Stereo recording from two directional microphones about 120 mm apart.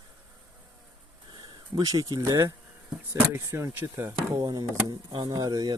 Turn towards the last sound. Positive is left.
turn(degrees=-30)  # may be behind; listen again after turning